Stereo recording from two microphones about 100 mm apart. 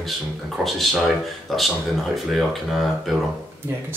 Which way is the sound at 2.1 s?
Centre (ahead or behind).